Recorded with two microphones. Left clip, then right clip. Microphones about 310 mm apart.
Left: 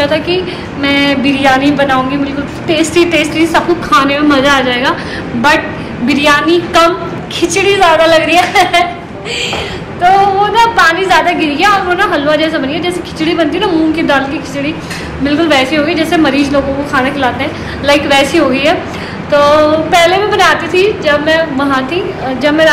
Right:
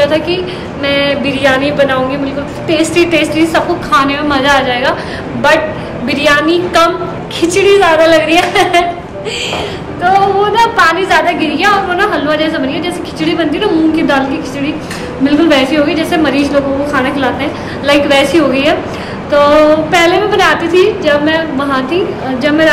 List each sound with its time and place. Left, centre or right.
0.0 s a woman's voice: centre
6.0 s a woman's voice: centre
10.0 s a woman's voice: centre
15.2 s a woman's voice: centre